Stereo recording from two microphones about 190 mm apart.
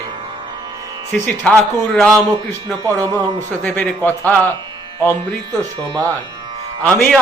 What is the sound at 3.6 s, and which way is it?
Speech, 10° left (ahead or behind).